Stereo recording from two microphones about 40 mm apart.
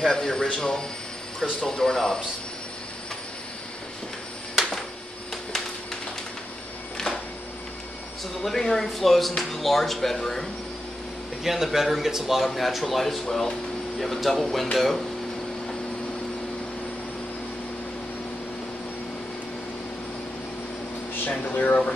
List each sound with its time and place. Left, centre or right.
0.0 s speech: centre
1.4 s speech: centre
8.4 s speech: centre
11.4 s a man's voice: centre
21.3 s speech: left